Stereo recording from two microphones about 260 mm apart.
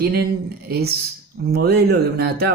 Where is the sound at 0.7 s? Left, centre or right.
Right.